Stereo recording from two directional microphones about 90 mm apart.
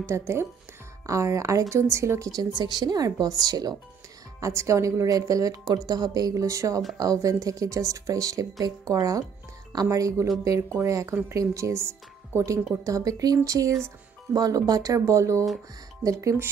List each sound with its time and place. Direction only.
0.0 s speech: 30° right (ahead or behind); by 3.7 s 45° right (ahead or behind)
4.4 s speech: 35° right (ahead or behind)